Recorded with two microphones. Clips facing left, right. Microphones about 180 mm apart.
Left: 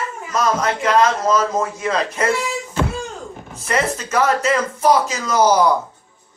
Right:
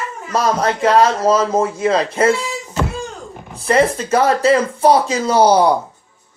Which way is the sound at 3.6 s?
30° right (ahead or behind).